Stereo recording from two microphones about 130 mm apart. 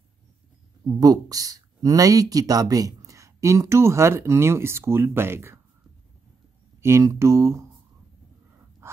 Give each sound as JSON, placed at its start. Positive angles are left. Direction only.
{"t": 0.9, "sound": "speech", "side_deg": -30}
{"t": 6.8, "sound": "speech", "side_deg": -20}